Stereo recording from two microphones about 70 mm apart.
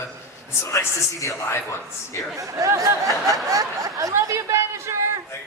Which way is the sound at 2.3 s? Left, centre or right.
Right.